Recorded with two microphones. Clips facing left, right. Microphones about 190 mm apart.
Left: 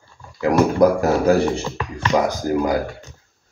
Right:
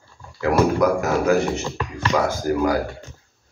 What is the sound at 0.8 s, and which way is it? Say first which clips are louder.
Speech: left 4 dB; 35° left (ahead or behind).